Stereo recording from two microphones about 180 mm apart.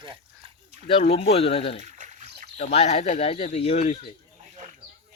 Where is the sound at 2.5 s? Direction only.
40° left (ahead or behind).